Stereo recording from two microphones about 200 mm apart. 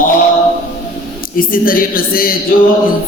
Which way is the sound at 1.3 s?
45° left (ahead or behind).